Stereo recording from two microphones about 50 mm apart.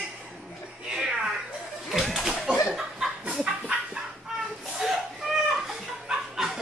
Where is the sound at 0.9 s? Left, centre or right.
Centre.